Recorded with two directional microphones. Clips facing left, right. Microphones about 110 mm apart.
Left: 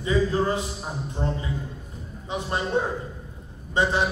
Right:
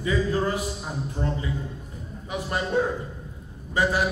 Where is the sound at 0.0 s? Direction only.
25° left (ahead or behind).